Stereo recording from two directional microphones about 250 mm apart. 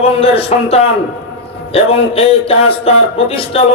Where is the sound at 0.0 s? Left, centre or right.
Left.